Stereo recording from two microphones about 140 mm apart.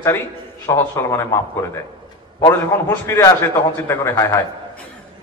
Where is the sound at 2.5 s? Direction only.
20° left (ahead or behind).